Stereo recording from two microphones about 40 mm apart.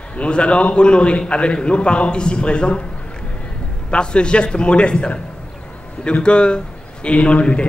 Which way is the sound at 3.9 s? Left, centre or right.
Left.